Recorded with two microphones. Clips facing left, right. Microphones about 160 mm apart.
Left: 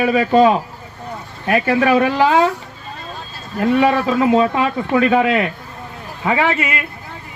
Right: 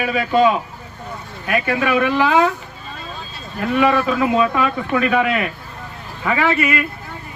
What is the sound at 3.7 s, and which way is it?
Speech, 30° left (ahead or behind).